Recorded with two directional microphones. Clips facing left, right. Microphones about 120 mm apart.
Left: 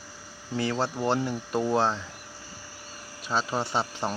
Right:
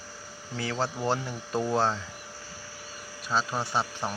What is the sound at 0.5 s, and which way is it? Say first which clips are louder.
Speech: left 3 dB; 5° left (ahead or behind).